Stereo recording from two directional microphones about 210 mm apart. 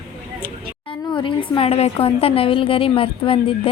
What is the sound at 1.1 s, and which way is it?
A woman's voice, 25° left (ahead or behind).